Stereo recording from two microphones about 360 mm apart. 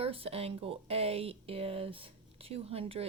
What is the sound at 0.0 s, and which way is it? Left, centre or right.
Speech, centre.